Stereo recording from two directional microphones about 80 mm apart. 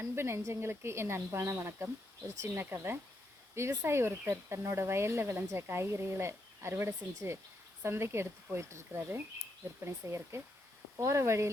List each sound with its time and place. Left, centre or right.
0.0 s speech: right